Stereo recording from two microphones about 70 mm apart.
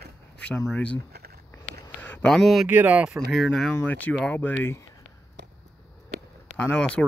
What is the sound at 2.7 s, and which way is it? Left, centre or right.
Speech, right.